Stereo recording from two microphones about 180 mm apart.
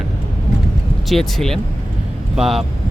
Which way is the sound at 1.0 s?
Centre (ahead or behind).